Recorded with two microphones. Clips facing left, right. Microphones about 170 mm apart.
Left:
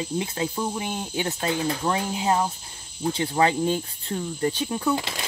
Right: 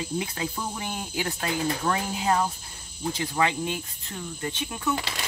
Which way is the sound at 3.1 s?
30° left (ahead or behind).